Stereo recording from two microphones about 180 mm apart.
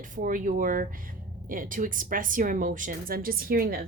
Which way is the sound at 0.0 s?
45° right (ahead or behind).